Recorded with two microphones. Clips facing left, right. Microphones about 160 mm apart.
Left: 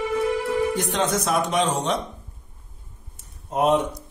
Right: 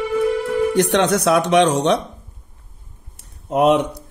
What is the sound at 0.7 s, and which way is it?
Speech, 75° right (ahead or behind).